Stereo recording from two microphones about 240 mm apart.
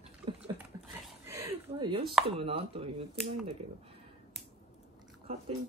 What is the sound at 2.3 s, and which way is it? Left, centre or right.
Speech, right.